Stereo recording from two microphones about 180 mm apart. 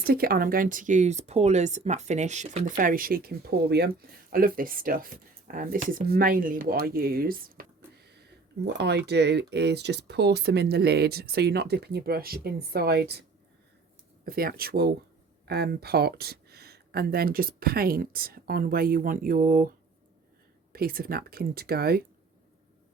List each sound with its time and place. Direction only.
0.0 s speech: 55° right (ahead or behind)
8.0 s speech: 65° right (ahead or behind)
14.3 s speech: 55° right (ahead or behind)
20.7 s speech: 55° right (ahead or behind)